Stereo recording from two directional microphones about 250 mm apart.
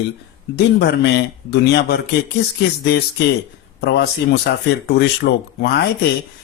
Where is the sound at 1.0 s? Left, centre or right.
Left.